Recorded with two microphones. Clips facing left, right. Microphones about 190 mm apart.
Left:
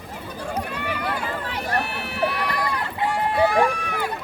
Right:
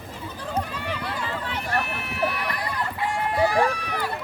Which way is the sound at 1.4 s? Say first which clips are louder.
Left 1 dB; 35° left (ahead or behind).